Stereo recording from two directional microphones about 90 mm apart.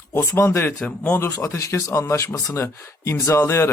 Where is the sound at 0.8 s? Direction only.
15° left (ahead or behind).